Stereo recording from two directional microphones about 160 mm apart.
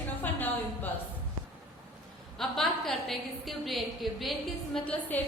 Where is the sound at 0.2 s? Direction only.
10° left (ahead or behind).